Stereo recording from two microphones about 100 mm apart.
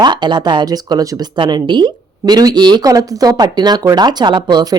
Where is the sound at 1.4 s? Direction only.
50° right (ahead or behind).